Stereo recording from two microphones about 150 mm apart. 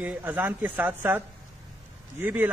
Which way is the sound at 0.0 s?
10° right (ahead or behind).